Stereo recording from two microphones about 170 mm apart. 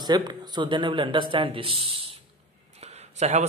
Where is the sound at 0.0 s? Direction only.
25° right (ahead or behind).